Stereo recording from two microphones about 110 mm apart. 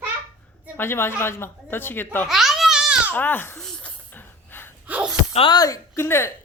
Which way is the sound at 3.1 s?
15° left (ahead or behind).